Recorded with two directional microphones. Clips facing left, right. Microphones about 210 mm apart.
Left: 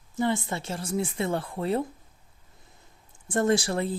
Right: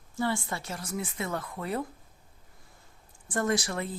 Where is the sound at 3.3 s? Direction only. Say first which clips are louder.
Left 5 dB; 25° left (ahead or behind).